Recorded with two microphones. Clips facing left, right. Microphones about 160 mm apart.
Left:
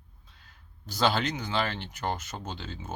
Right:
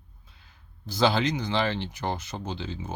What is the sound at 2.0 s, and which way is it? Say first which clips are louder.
Speech: right 1 dB; 10° right (ahead or behind).